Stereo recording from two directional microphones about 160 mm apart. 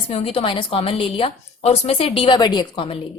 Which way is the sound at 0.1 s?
40° left (ahead or behind).